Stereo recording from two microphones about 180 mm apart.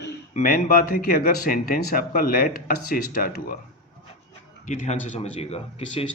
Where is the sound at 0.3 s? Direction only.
50° left (ahead or behind).